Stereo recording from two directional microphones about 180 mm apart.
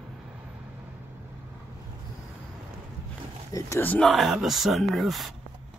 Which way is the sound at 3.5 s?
15° left (ahead or behind).